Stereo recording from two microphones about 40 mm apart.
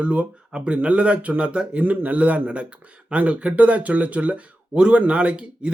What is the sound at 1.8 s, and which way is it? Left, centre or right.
Speech, right.